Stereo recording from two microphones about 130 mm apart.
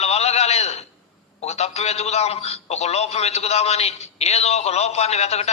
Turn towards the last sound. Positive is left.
turn(degrees=55)  # may be behind; listen again after turning